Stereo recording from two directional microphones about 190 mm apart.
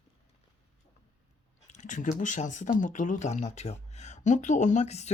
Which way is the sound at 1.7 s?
40° left (ahead or behind).